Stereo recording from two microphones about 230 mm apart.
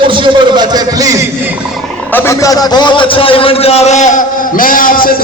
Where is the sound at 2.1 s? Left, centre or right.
Centre.